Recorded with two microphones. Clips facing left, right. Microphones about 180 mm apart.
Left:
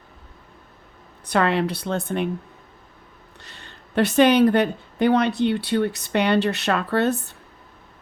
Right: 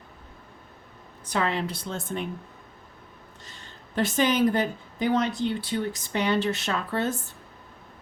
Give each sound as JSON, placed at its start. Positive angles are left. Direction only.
{"t": 1.2, "sound": "speech", "side_deg": 70}
{"t": 3.4, "sound": "speech", "side_deg": 65}